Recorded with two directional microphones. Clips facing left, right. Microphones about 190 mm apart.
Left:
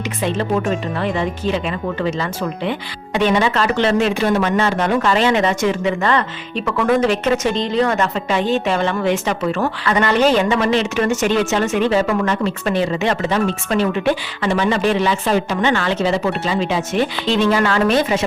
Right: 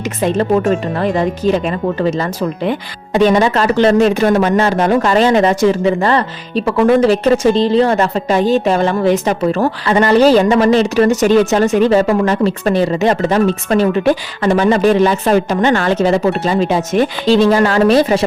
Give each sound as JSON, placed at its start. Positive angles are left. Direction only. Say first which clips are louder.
{"t": 0.2, "sound": "speech", "louder": "right 6 dB", "side_deg": -40}